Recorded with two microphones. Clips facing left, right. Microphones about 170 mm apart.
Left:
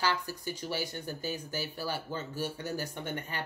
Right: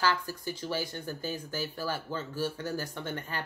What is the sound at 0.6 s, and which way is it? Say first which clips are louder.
Speech: right 2 dB; 15° left (ahead or behind).